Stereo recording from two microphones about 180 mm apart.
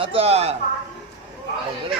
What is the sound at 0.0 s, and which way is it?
Speech, 30° right (ahead or behind).